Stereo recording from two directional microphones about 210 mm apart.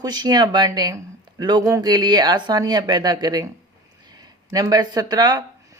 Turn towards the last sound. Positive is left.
turn(degrees=-20)  # may be behind; listen again after turning